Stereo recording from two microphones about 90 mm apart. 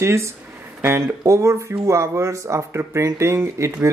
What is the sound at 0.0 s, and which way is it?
Speech, 30° right (ahead or behind).